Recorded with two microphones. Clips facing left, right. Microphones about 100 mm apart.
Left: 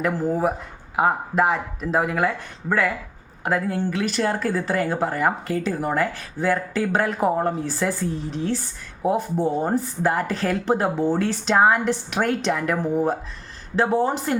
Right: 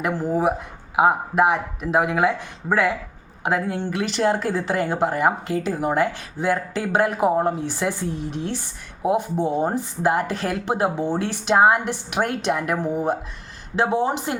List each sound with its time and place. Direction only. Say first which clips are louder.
0.0 s speech: right 1 dB; 15° right (ahead or behind)
8.1 s speech: even; 65° right (ahead or behind)
8.4 s speech: left 3 dB; 15° right (ahead or behind)